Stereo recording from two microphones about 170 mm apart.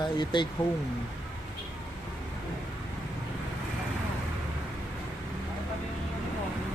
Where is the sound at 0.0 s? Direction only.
25° left (ahead or behind).